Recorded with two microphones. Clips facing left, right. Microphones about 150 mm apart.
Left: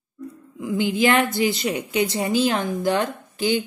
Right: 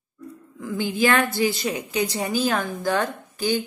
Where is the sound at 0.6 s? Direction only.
15° left (ahead or behind).